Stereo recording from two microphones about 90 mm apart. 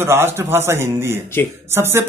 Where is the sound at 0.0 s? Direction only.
25° right (ahead or behind).